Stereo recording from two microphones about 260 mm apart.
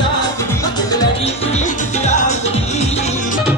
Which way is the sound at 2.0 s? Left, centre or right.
Left.